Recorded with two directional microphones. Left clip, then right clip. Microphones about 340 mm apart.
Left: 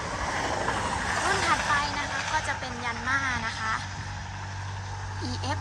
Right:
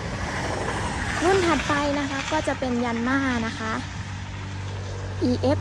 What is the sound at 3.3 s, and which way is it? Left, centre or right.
Speech, centre.